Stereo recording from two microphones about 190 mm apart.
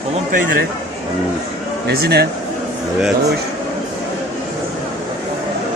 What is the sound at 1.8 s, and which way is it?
Speech, 60° right (ahead or behind).